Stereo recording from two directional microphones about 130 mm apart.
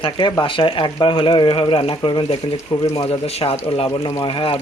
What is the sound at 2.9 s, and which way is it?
Speech, 50° left (ahead or behind).